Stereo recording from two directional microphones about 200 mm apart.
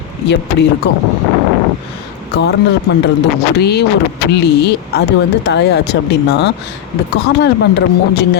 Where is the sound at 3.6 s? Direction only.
55° left (ahead or behind).